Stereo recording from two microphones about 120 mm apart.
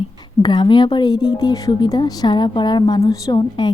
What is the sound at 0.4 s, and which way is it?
Speech, 40° left (ahead or behind).